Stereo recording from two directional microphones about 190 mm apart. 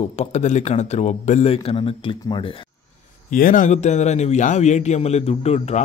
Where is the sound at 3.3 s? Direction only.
45° left (ahead or behind).